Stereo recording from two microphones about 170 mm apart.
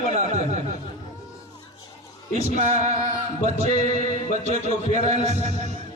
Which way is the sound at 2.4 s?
45° right (ahead or behind).